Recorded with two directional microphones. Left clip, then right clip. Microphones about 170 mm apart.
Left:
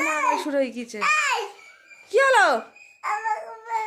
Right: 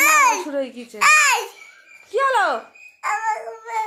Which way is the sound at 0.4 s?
40° left (ahead or behind).